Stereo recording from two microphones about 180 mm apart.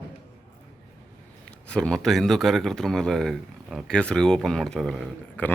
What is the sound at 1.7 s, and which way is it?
Speech, 5° left (ahead or behind).